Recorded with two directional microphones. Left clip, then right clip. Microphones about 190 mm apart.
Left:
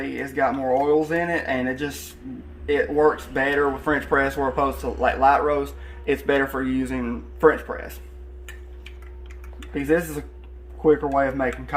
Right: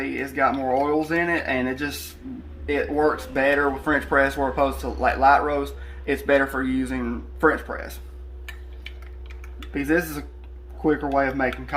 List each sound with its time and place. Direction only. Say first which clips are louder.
0.0 s speech: right 1 dB; 5° left (ahead or behind)
0.7 s speech: left 2 dB; 5° right (ahead or behind); by 7.8 s 10° left (ahead or behind)
9.7 s speech: left 1 dB; centre (ahead or behind)